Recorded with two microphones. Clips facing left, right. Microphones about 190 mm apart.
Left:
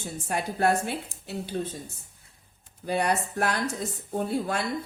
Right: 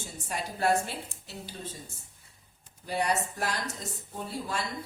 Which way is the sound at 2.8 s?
60° left (ahead or behind).